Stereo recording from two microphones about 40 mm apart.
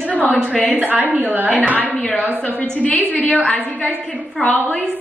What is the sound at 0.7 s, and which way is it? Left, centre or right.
Speech, right.